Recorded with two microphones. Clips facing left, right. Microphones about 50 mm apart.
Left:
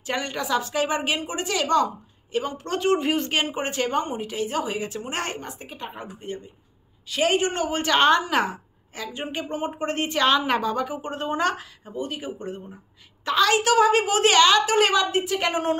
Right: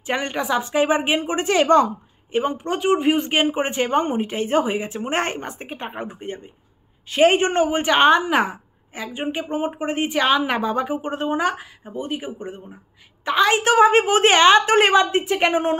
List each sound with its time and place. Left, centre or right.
0.0 s a woman's voice: right
2.6 s a woman's voice: centre
7.8 s a woman's voice: centre
10.6 s a woman's voice: right